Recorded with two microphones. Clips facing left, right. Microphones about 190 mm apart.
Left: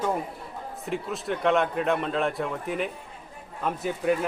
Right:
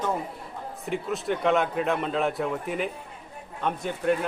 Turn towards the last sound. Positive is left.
turn(degrees=5)  # may be behind; listen again after turning